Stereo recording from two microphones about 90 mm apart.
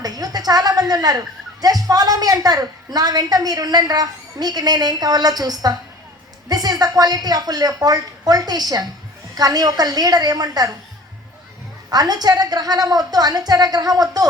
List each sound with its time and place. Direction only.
0.0 s a sound: 45° right (ahead or behind)
1.6 s a woman's voice: 45° right (ahead or behind)
11.9 s a woman's voice: 45° right (ahead or behind)